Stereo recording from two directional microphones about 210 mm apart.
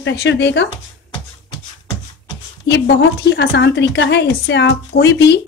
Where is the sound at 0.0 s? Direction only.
60° left (ahead or behind).